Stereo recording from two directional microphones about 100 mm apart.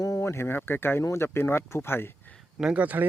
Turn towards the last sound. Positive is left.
turn(degrees=-15)  # may be behind; listen again after turning